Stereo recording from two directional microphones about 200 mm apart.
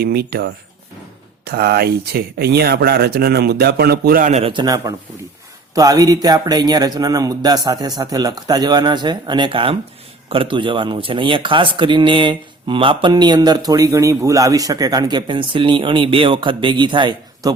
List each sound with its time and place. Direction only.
0.0 s speech: 50° right (ahead or behind); by 17.5 s 25° right (ahead or behind)